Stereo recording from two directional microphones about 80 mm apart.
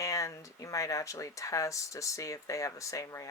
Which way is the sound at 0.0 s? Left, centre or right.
Left.